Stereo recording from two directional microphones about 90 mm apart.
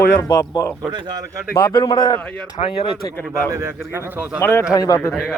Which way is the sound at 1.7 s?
50° left (ahead or behind).